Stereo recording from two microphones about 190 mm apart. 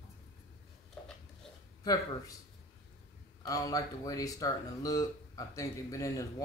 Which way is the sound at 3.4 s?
20° left (ahead or behind).